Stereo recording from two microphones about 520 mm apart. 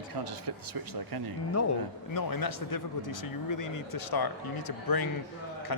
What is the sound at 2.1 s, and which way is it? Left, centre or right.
Speech, left.